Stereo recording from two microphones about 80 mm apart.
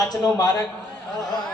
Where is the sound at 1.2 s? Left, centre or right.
Left.